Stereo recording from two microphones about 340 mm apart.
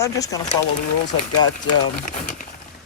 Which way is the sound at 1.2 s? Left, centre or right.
Left.